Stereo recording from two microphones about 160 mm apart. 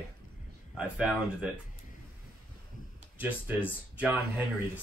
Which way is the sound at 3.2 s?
10° right (ahead or behind).